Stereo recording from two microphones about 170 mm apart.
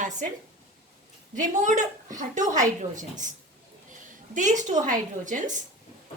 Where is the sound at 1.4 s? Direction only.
45° right (ahead or behind).